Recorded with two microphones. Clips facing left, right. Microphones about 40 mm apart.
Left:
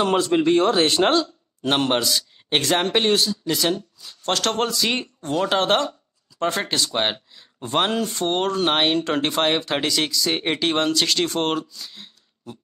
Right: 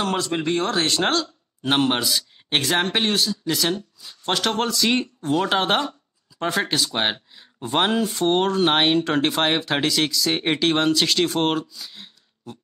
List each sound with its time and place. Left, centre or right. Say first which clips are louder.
0.0 s speech: left 5 dB; centre
1.0 s a man's voice: left 3 dB; centre